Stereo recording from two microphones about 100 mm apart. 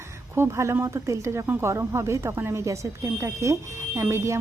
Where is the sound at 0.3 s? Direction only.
30° right (ahead or behind).